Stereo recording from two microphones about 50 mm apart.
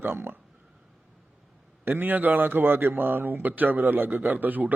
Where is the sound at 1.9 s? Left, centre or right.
Right.